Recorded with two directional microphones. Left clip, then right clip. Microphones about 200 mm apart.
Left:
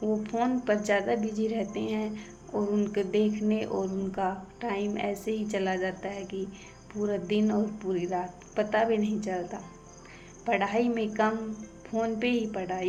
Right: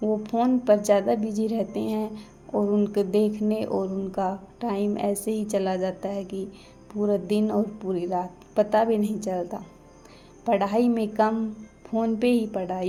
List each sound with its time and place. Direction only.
0.0 s speech: 40° right (ahead or behind)